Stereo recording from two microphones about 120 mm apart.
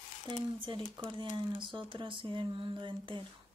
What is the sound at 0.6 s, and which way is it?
Speech, 45° right (ahead or behind).